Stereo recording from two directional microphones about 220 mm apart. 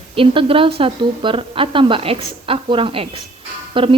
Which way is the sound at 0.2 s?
25° right (ahead or behind).